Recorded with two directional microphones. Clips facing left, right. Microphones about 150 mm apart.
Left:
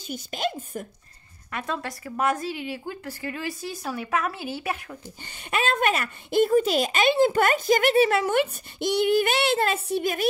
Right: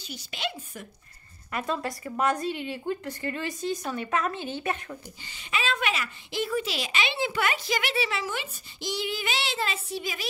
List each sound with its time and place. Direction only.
0.0 s speech: 45° left (ahead or behind)
1.5 s a woman's voice: centre (ahead or behind)
5.2 s speech: 55° left (ahead or behind)